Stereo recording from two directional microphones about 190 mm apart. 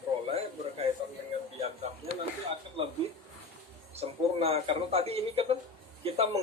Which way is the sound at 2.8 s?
30° right (ahead or behind).